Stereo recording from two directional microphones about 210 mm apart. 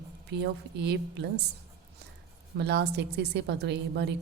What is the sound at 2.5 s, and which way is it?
A woman's voice, 50° right (ahead or behind).